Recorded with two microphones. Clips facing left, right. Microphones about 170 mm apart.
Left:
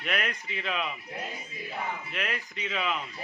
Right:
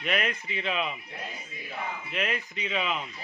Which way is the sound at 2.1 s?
Centre (ahead or behind).